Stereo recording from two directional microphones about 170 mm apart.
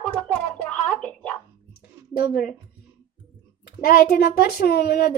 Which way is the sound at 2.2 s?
60° left (ahead or behind).